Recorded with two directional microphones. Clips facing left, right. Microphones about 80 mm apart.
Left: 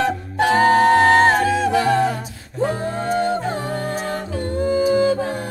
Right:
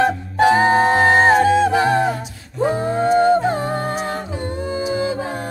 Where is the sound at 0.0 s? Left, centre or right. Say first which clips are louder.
Right 4 dB; centre.